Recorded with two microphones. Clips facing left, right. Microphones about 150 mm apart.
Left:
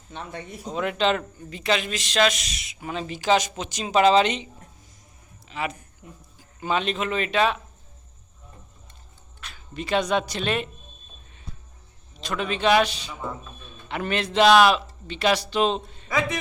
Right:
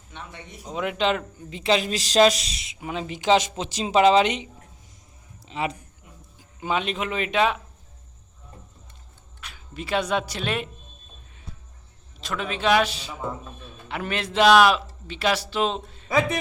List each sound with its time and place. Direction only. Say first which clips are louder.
0.1 s speech: left 5 dB; 40° left (ahead or behind)
0.6 s a man's voice: left 1 dB; 10° right (ahead or behind)
1.5 s speech: right 3 dB; 30° right (ahead or behind)
2.8 s speech: right 1 dB; 15° right (ahead or behind)
5.5 s speech: right 2 dB; 25° right (ahead or behind)
6.6 s a man's voice: left 1 dB; 10° right (ahead or behind)
9.4 s speech: left 2 dB; 10° right (ahead or behind)
12.2 s a man's voice: left 2 dB; centre (ahead or behind)